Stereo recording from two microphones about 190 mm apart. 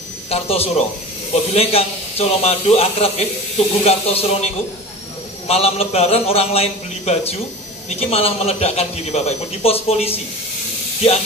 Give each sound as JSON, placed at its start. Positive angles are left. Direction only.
{"t": 0.3, "sound": "speech", "side_deg": 30}
{"t": 5.5, "sound": "speech", "side_deg": 30}